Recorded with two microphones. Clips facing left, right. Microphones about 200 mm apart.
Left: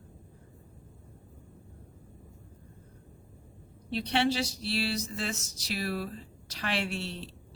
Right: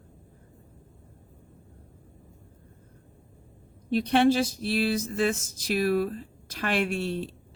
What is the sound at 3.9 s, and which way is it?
Speech, 50° right (ahead or behind).